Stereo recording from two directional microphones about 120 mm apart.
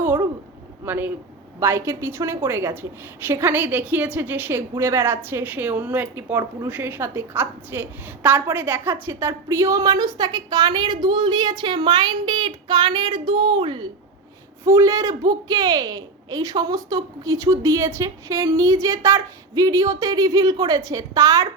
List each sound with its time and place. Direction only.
0.0 s a sound: 20° right (ahead or behind)
0.9 s a woman's voice: 15° right (ahead or behind); by 13.8 s 40° right (ahead or behind)
14.6 s a woman's voice: 25° right (ahead or behind)